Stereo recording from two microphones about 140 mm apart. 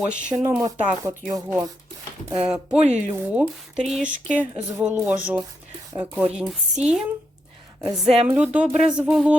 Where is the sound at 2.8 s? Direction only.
55° right (ahead or behind).